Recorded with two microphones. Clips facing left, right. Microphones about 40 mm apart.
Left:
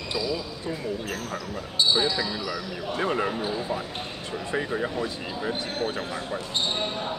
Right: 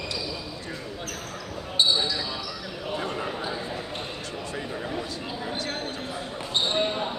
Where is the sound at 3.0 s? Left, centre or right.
Left.